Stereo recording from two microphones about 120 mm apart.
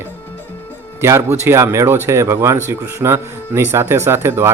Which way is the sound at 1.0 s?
20° right (ahead or behind).